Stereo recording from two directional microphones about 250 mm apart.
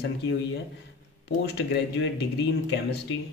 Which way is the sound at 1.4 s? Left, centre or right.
Left.